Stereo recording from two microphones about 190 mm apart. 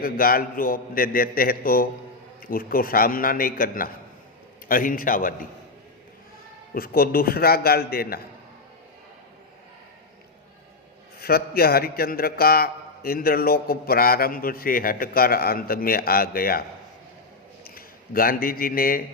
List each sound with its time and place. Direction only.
0.0 s a man's voice: 50° left (ahead or behind)
6.7 s a man's voice: 50° left (ahead or behind)
11.2 s a man's voice: 55° left (ahead or behind)
17.7 s a man's voice: 50° left (ahead or behind)